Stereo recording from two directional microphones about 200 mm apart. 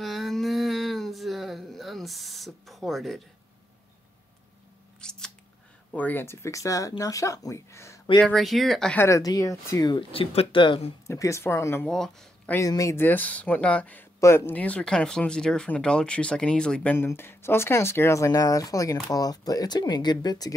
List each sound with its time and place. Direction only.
0.0 s a sound: centre (ahead or behind)
5.0 s scissors: 5° left (ahead or behind)
5.9 s speech: 10° left (ahead or behind)
8.2 s speech: centre (ahead or behind); by 10.9 s 25° left (ahead or behind)
11.1 s speech: 15° left (ahead or behind)
12.5 s speech: 15° left (ahead or behind)